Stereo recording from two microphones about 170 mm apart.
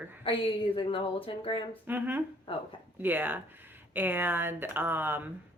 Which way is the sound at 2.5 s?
30° left (ahead or behind).